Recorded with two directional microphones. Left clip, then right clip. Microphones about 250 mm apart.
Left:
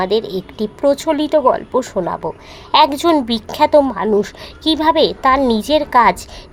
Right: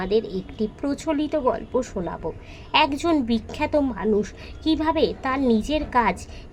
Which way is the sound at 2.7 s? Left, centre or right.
Centre.